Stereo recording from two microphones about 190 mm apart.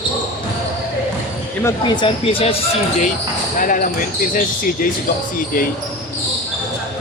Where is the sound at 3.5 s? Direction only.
45° left (ahead or behind).